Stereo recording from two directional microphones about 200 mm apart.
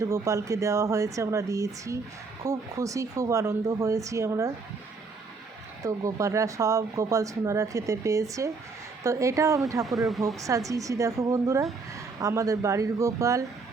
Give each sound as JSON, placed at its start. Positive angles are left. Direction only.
{"t": 0.0, "sound": "speech", "side_deg": -15}
{"t": 5.8, "sound": "speech", "side_deg": -15}
{"t": 9.8, "sound": "speech", "side_deg": 0}
{"t": 10.4, "sound": "speech", "side_deg": -15}